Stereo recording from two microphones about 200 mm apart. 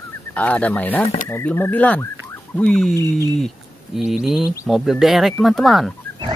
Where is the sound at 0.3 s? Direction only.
5° left (ahead or behind).